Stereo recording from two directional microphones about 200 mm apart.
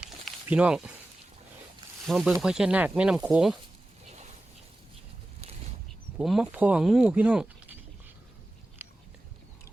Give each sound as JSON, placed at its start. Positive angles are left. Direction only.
{"t": 0.4, "sound": "speech", "side_deg": -5}
{"t": 2.0, "sound": "speech", "side_deg": 0}
{"t": 6.1, "sound": "speech", "side_deg": -5}
{"t": 8.8, "sound": "biting", "side_deg": -10}